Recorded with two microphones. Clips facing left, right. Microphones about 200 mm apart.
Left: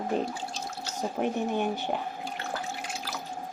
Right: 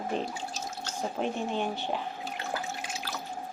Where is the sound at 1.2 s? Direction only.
15° left (ahead or behind).